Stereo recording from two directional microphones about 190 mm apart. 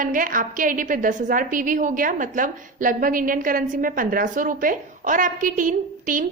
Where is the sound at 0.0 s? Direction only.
45° right (ahead or behind).